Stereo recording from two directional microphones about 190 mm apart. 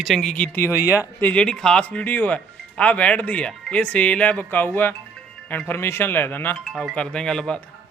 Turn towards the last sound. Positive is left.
turn(degrees=5)  # may be behind; listen again after turning